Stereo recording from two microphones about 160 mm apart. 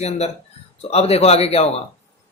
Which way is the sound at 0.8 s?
40° left (ahead or behind).